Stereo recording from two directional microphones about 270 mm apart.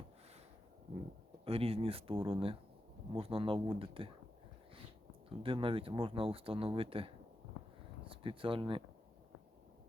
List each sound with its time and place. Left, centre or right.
1.5 s speech: right
5.4 s speech: centre